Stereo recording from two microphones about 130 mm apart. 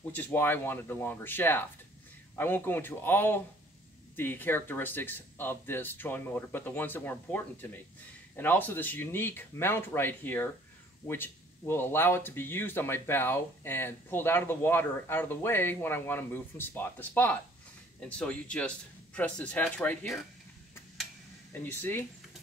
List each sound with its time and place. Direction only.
0.1 s speech: 15° left (ahead or behind)